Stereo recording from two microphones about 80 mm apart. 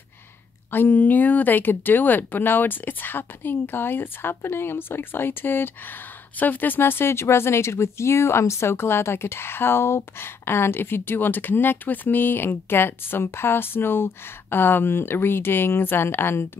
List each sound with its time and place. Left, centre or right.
0.7 s speech: left